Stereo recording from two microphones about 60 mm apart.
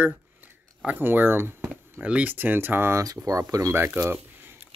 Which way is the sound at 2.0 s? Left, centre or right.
Right.